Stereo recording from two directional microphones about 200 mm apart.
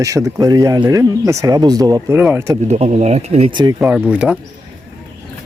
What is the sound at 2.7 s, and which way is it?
Speech, 35° right (ahead or behind).